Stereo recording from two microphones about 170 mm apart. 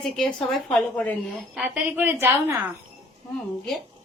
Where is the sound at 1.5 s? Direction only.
5° right (ahead or behind).